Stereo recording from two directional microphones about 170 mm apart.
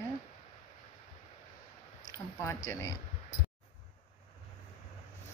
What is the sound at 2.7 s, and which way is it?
Speech, 15° left (ahead or behind).